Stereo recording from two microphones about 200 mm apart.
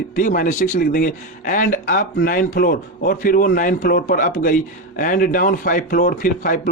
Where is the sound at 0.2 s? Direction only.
40° left (ahead or behind).